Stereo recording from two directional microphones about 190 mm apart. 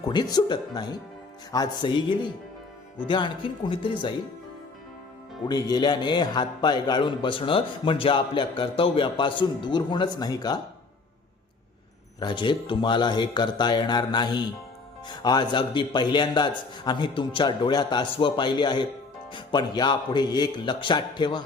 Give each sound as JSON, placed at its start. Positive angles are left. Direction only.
{"t": 0.1, "sound": "a man's voice", "side_deg": 20}
{"t": 5.5, "sound": "a man's voice", "side_deg": 20}
{"t": 12.2, "sound": "a man's voice", "side_deg": 25}